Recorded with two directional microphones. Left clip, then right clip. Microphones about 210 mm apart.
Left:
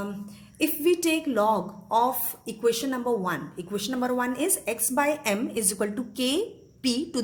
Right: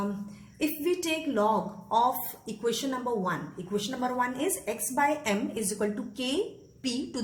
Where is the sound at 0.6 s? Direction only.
35° left (ahead or behind).